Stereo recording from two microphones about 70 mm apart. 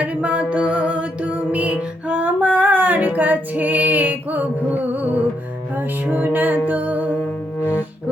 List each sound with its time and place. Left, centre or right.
0.0 s music: centre